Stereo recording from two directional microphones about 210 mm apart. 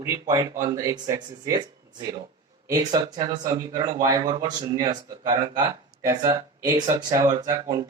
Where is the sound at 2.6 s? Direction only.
20° right (ahead or behind).